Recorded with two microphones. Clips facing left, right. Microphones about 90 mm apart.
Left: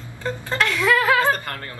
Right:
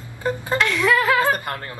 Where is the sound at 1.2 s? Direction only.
15° right (ahead or behind).